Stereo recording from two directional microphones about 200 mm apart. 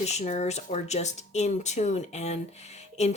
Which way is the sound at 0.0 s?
35° left (ahead or behind).